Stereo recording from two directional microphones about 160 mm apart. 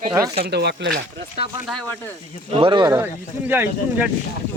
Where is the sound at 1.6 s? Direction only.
5° left (ahead or behind).